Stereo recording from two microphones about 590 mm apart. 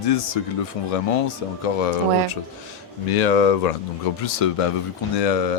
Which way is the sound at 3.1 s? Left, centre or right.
Left.